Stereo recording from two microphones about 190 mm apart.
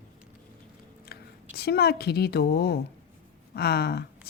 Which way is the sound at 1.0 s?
55° left (ahead or behind).